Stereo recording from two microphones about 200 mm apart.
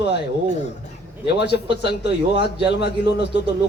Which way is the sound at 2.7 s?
55° left (ahead or behind).